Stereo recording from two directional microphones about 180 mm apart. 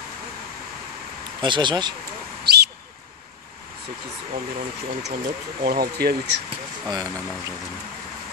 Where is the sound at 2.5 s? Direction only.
65° right (ahead or behind).